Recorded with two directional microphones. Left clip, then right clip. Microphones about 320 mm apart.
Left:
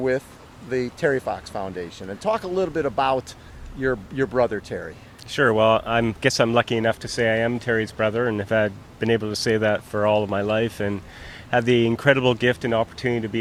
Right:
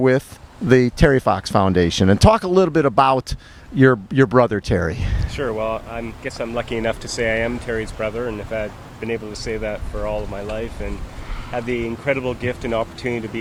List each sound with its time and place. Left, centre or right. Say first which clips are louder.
0.7 s speech: right 8 dB; right
5.3 s speech: left 6 dB; left